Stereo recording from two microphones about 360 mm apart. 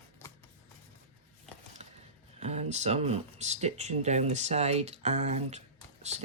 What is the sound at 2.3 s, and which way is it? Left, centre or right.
Speech, centre.